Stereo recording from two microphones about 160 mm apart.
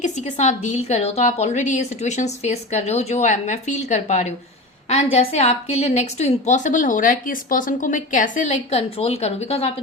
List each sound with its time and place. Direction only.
0.0 s a woman's voice: 45° left (ahead or behind)